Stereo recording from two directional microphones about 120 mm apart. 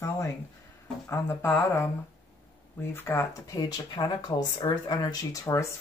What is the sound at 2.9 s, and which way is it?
Speech, 20° left (ahead or behind).